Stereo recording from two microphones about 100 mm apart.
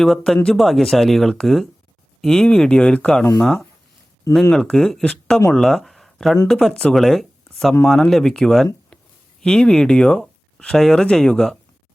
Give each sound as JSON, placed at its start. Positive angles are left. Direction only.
{"t": 0.0, "sound": "speech", "side_deg": 5}